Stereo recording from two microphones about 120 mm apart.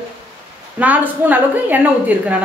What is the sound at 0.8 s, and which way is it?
Speech, 15° right (ahead or behind).